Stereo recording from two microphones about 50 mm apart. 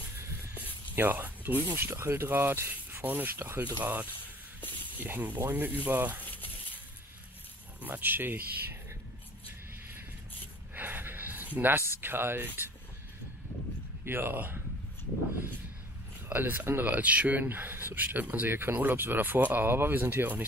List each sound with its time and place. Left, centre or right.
0.9 s speech: right
2.0 s speech: right
3.3 s speech: right
3.8 s speech: right
7.8 s speech: right
10.7 s a sound: right
11.7 s a sound: right
14.0 s speech: right
16.3 s speech: right
16.8 s speech: right